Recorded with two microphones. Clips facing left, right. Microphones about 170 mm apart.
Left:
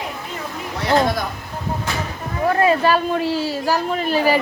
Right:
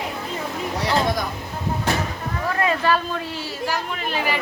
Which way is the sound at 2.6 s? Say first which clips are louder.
Left 4 dB; 35° left (ahead or behind).